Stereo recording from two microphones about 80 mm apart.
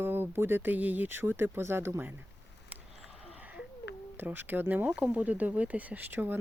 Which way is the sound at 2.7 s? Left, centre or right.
Centre.